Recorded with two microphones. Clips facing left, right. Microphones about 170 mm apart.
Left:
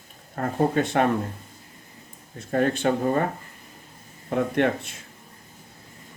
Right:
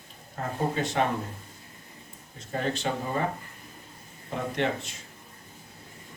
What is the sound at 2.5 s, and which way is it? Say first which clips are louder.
Speech: left 7 dB; 55° left (ahead or behind).